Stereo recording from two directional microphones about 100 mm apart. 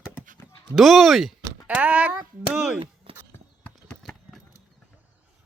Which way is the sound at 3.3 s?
20° left (ahead or behind).